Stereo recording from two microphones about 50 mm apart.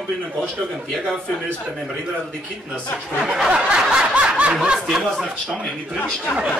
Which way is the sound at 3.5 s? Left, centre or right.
Centre.